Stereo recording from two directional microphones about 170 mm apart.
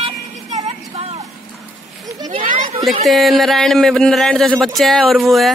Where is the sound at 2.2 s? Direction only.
30° right (ahead or behind).